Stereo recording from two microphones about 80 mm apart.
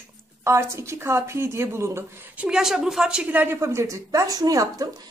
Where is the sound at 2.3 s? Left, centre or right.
Centre.